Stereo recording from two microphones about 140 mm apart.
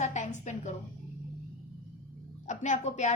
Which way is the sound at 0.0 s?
60° left (ahead or behind).